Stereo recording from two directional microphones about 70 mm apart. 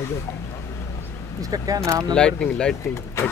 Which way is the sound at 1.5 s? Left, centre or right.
Right.